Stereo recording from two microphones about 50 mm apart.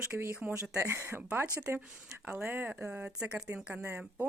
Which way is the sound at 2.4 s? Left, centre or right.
Right.